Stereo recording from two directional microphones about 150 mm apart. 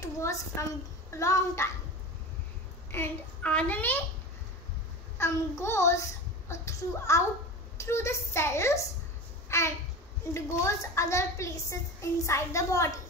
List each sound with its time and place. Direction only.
0.0 s a sound: 20° left (ahead or behind)
1.1 s a woman's voice: 20° left (ahead or behind)
2.9 s a child's voice: 10° left (ahead or behind)
5.1 s a woman's voice: 15° left (ahead or behind)
9.5 s babbling: 20° left (ahead or behind)
10.3 s a woman's voice: 20° left (ahead or behind)